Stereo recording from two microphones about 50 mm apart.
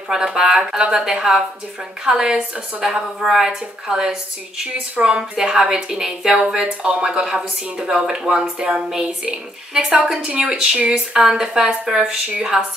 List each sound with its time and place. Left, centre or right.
0.1 s speech: centre
10.2 s speech: centre